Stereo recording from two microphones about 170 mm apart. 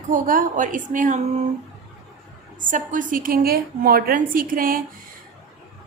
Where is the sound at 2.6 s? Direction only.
50° right (ahead or behind).